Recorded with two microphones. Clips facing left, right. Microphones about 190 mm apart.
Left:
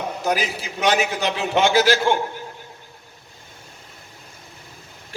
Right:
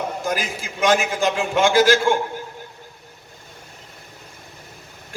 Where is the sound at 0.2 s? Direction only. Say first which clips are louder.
Left 2 dB; 50° right (ahead or behind).